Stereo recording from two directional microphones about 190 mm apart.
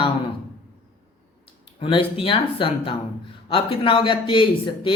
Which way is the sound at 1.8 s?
25° left (ahead or behind).